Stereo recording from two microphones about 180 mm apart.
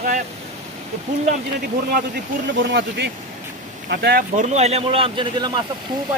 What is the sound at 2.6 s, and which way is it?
Speech, 70° right (ahead or behind).